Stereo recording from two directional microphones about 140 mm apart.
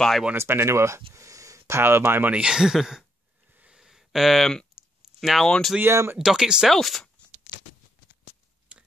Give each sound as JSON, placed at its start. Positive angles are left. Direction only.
{"t": 0.2, "sound": "speech", "side_deg": -15}
{"t": 3.5, "sound": "a sound", "side_deg": -5}
{"t": 5.8, "sound": "speech", "side_deg": -15}
{"t": 6.1, "sound": "speech", "side_deg": -5}
{"t": 8.7, "sound": "tick-tock", "side_deg": -5}